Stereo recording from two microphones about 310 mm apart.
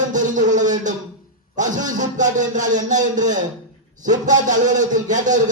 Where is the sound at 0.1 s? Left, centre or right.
Right.